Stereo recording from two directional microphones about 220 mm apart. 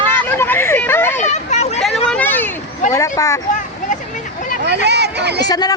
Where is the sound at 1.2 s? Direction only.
30° left (ahead or behind).